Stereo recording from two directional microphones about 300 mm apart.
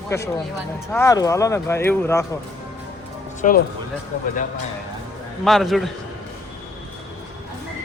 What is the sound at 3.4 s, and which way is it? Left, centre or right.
Speech, left.